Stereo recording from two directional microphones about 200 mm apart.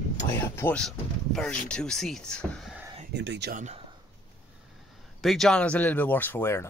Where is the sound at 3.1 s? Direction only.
60° right (ahead or behind).